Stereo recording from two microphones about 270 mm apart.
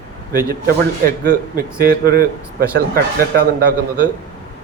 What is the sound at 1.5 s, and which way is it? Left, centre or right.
A man's voice, right.